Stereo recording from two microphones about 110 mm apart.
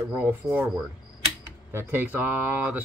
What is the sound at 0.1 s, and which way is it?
Speech, 15° right (ahead or behind).